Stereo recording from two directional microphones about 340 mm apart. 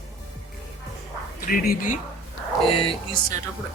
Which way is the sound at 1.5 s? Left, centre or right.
Left.